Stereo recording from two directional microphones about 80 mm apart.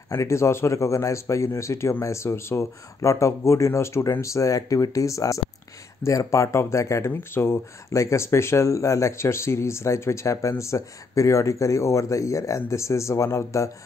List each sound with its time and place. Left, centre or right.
0.1 s speech: left